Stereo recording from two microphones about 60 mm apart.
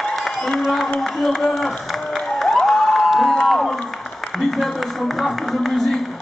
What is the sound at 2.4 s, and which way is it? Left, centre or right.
Crowd, centre.